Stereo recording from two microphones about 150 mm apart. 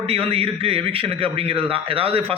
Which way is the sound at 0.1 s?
40° right (ahead or behind).